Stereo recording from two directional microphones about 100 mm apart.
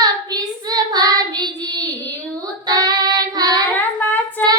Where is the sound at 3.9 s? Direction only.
20° left (ahead or behind).